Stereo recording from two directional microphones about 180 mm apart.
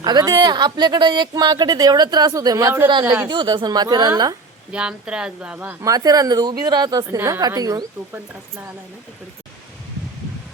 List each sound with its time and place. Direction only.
0.0 s a woman's voice: 20° right (ahead or behind)
3.2 s speech: 25° right (ahead or behind)
4.7 s a woman's voice: 5° right (ahead or behind)